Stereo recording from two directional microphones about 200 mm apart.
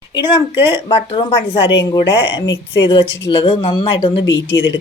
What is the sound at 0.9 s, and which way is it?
Speech, 25° left (ahead or behind).